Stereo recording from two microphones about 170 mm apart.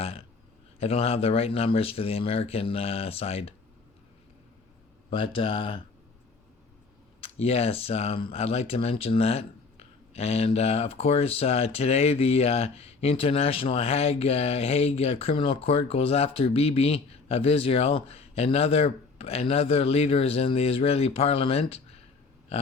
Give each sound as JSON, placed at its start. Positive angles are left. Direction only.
{"t": 0.8, "sound": "speech", "side_deg": 35}
{"t": 5.1, "sound": "speech", "side_deg": 30}
{"t": 7.2, "sound": "speech", "side_deg": 35}